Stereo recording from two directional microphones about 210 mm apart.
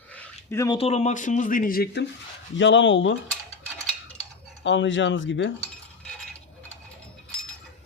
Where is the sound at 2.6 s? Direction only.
60° left (ahead or behind).